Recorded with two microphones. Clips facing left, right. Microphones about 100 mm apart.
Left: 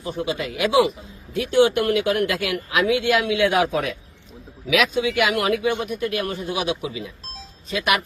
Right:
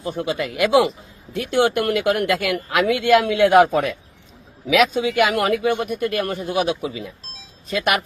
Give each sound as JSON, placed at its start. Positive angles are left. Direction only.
{"t": 0.2, "sound": "speech", "side_deg": -55}